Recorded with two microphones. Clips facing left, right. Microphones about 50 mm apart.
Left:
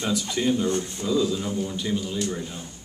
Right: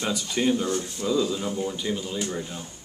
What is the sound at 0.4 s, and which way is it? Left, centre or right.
Speech, centre.